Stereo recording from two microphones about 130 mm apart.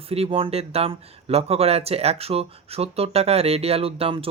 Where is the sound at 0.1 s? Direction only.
50° right (ahead or behind).